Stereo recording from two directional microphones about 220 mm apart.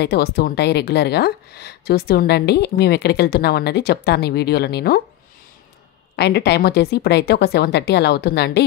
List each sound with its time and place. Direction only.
0.0 s speech: 45° left (ahead or behind)
6.1 s speech: 50° left (ahead or behind)